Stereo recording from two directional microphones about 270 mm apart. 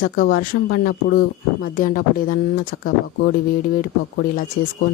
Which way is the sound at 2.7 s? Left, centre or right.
Left.